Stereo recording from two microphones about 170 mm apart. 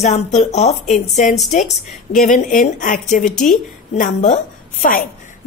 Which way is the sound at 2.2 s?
45° left (ahead or behind).